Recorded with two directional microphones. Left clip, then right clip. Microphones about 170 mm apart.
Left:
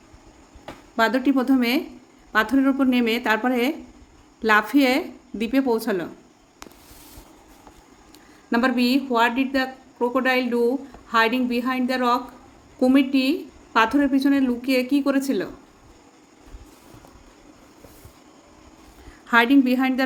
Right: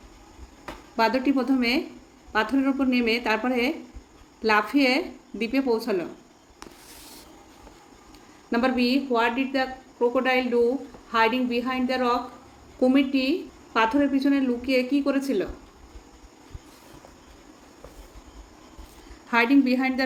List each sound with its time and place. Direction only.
0.9 s speech: 40° left (ahead or behind)
8.4 s speech: 45° left (ahead or behind)
19.3 s a woman's voice: 40° left (ahead or behind)